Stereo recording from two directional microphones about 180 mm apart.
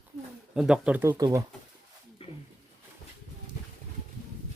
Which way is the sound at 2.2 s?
30° left (ahead or behind).